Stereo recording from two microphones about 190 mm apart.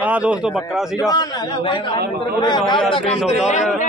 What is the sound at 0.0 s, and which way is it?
Speech, 5° right (ahead or behind).